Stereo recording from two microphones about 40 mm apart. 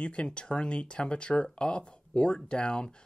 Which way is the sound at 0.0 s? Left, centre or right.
Left.